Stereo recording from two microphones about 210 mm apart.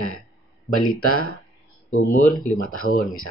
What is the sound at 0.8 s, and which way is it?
Speech, 90° left.